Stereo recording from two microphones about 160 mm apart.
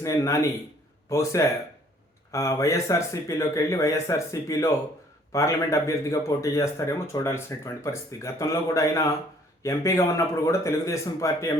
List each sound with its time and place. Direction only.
0.0 s a man's voice: 20° left (ahead or behind)